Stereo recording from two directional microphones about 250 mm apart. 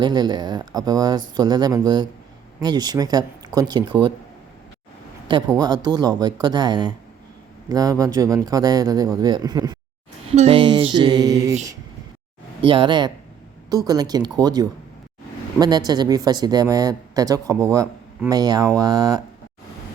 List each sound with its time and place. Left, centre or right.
0.0 s speech: centre
5.5 s speech: centre
10.3 s music: right
12.6 s speech: centre